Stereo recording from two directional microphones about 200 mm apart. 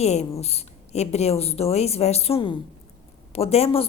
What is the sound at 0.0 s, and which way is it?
A woman's voice, 30° left (ahead or behind).